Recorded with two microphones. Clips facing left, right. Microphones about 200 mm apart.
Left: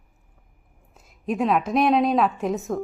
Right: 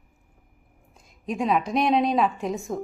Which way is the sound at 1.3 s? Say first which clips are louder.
Left 2 dB; centre (ahead or behind).